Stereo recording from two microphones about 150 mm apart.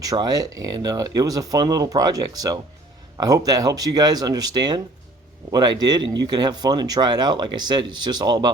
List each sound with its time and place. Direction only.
0.0 s speech: 25° right (ahead or behind)